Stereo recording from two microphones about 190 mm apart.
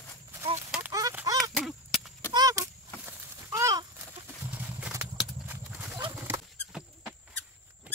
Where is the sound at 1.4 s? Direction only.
Centre (ahead or behind).